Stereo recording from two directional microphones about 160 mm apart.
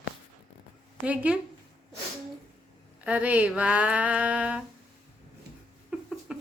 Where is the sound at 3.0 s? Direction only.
10° right (ahead or behind).